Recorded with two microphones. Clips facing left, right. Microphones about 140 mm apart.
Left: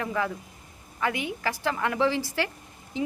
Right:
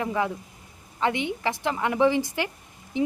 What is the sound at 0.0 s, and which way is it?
Speech, 20° right (ahead or behind).